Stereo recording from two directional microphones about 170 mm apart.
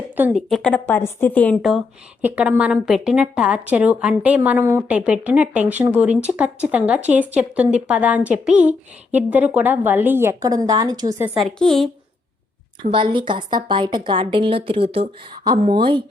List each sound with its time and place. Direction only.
0.3 s a woman's voice: 5° left (ahead or behind)
2.2 s a woman's voice: 10° right (ahead or behind)
11.3 s a woman's voice: centre (ahead or behind)
12.9 s a woman's voice: 30° right (ahead or behind)